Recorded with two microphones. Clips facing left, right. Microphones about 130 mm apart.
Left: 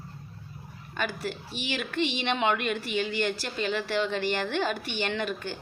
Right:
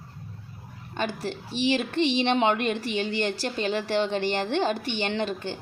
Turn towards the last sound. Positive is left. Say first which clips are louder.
# right 3 dB
turn(degrees=-25)  # may be behind; listen again after turning